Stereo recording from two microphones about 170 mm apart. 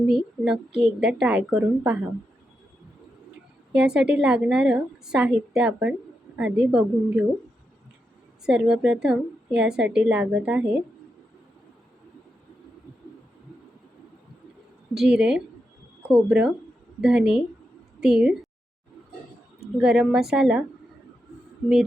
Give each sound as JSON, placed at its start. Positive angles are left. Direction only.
{"t": 0.0, "sound": "a woman's voice", "side_deg": -5}
{"t": 3.7, "sound": "a woman's voice", "side_deg": -5}
{"t": 8.4, "sound": "a woman's voice", "side_deg": -5}
{"t": 16.0, "sound": "a woman's voice", "side_deg": -5}
{"t": 19.5, "sound": "a woman's voice", "side_deg": -5}